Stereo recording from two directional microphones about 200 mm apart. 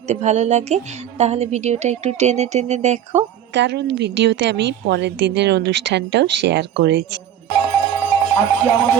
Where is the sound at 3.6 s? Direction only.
60° right (ahead or behind).